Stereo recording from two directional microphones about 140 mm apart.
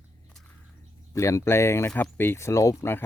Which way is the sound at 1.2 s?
20° left (ahead or behind).